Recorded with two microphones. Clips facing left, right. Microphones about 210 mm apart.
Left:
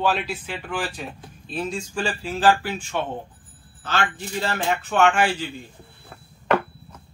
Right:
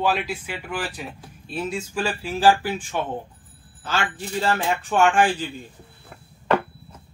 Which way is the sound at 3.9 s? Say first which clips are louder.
Even; 40° right (ahead or behind).